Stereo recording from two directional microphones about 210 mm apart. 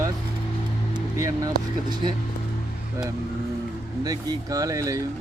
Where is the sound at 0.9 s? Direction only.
15° right (ahead or behind).